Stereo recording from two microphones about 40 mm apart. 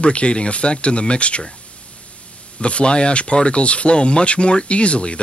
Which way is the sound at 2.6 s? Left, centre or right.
Left.